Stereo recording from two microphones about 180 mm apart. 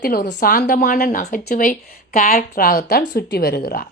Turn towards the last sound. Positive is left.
turn(degrees=60)  # may be behind; listen again after turning